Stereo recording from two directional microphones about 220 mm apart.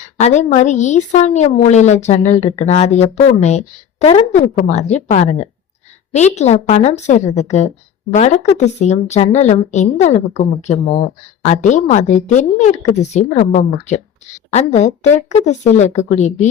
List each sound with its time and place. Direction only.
0.2 s a woman's voice: 30° left (ahead or behind)